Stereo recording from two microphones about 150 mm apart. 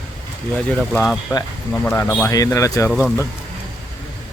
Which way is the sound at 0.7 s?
5° left (ahead or behind).